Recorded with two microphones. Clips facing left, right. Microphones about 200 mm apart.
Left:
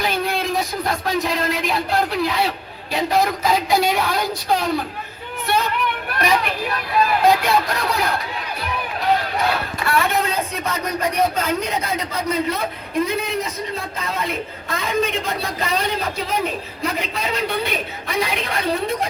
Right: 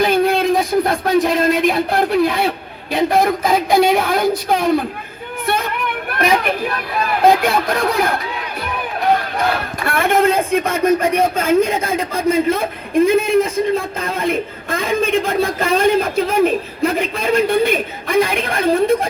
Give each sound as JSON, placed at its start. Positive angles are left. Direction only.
{"t": 0.0, "sound": "a man's voice", "side_deg": -50}
{"t": 5.5, "sound": "a sound", "side_deg": -50}
{"t": 6.1, "sound": "a child's voice", "side_deg": -50}
{"t": 9.8, "sound": "a man's voice", "side_deg": -50}